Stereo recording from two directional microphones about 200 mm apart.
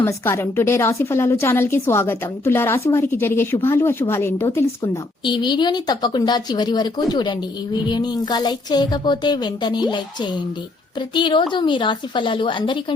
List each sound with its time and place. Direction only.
0.0 s a woman's voice: 15° left (ahead or behind)